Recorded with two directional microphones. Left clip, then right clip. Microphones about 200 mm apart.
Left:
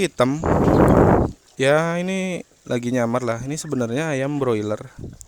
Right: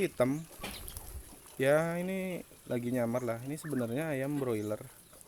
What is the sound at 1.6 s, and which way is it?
Speech, 30° left (ahead or behind).